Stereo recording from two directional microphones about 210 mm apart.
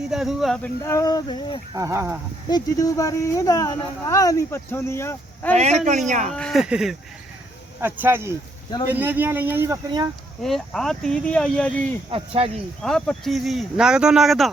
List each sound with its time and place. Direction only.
0.1 s speech: centre (ahead or behind)
0.8 s speech: 15° left (ahead or behind)
1.7 s speech: 15° right (ahead or behind)
2.5 s speech: 15° left (ahead or behind)
6.1 s speech: 35° right (ahead or behind)
6.3 s speech: centre (ahead or behind); by 10.1 s 15° right (ahead or behind)
10.4 s speech: centre (ahead or behind)
12.1 s speech: 25° right (ahead or behind)
12.8 s speech: centre (ahead or behind)